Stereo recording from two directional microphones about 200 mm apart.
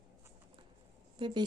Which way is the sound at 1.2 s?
25° right (ahead or behind).